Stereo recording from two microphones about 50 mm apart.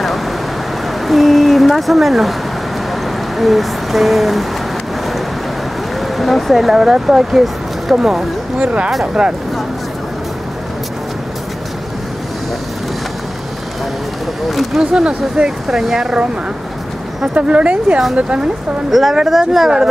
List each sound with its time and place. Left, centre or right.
1.0 s a sound: centre
3.3 s speech: centre
6.1 s speech: centre
8.6 s speech: right
14.5 s speech: centre
14.8 s speech: centre
17.3 s speech: right
18.9 s speech: centre